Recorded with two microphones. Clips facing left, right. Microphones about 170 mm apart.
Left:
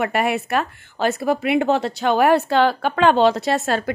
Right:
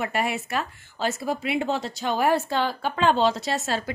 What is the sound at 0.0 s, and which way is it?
A woman's voice, 65° left (ahead or behind).